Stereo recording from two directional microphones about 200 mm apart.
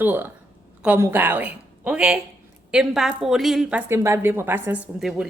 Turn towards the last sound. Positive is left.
turn(degrees=0)  # may be behind; listen again after turning